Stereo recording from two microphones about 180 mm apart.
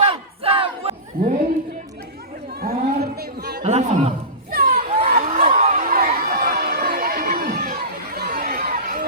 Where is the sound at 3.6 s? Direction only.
40° right (ahead or behind).